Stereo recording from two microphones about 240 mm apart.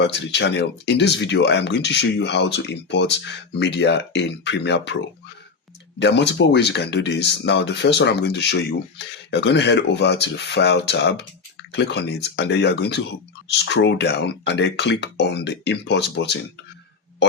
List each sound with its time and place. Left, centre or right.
0.0 s speech: left